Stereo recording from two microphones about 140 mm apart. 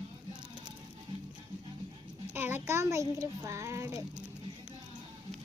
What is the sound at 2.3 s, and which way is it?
A child's voice, 15° right (ahead or behind).